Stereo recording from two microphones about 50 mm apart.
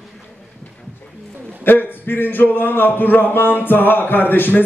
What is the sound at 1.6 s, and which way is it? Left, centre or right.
Speech, left.